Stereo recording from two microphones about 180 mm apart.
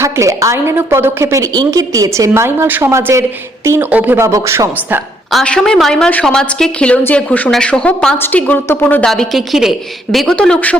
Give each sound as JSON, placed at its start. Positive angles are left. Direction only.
{"t": 0.0, "sound": "a woman's voice", "side_deg": -15}
{"t": 5.3, "sound": "a woman's voice", "side_deg": 5}